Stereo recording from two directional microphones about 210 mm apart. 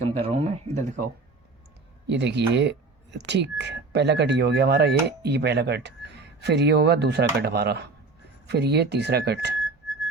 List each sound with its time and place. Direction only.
0.0 s speech: 30° right (ahead or behind)
2.0 s speech: 55° right (ahead or behind)